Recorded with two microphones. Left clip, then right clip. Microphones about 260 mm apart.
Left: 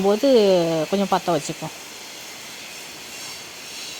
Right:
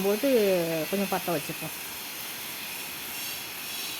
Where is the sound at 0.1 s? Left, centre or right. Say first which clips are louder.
Left 8 dB; left.